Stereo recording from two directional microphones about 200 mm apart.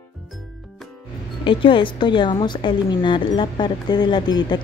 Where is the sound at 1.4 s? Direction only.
25° left (ahead or behind).